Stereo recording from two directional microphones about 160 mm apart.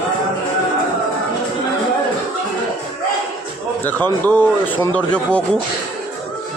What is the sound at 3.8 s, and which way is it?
Speech, 10° left (ahead or behind).